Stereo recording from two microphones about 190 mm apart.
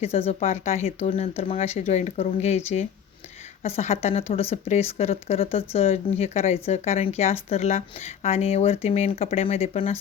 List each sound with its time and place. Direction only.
0.0 s speech: 30° left (ahead or behind)